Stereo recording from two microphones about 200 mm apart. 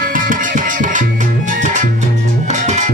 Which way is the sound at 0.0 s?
45° right (ahead or behind).